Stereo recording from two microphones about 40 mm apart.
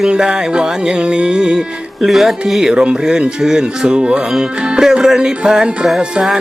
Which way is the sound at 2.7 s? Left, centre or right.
Right.